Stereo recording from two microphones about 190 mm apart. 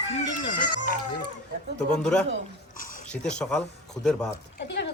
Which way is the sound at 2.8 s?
45° left (ahead or behind).